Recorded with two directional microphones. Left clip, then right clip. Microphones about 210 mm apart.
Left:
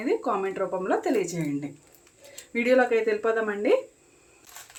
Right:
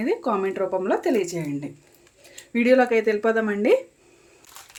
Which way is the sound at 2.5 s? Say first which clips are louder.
Right 3 dB; 40° right (ahead or behind).